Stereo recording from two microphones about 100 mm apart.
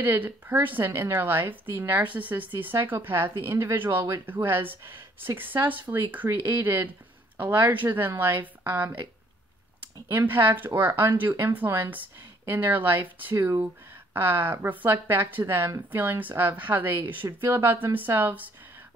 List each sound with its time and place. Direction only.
0.0 s a woman's voice: 20° right (ahead or behind)
10.0 s a woman's voice: 20° right (ahead or behind)